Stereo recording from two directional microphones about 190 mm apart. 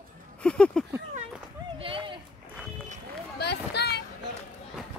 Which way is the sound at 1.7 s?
30° right (ahead or behind).